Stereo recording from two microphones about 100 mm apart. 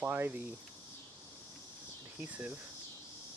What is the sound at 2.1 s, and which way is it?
Speech, 15° right (ahead or behind).